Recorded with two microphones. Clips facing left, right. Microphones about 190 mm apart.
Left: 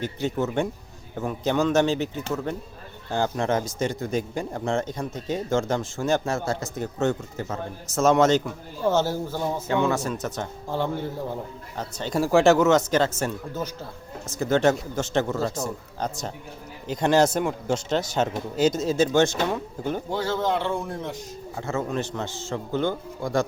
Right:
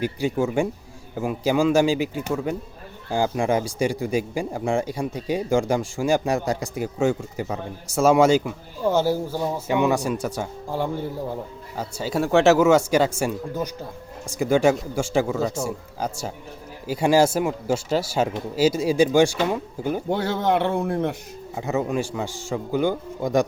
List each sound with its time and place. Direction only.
0.0 s speech: 10° right (ahead or behind)
20.1 s a man's voice: 60° right (ahead or behind)
21.5 s speech: 15° right (ahead or behind)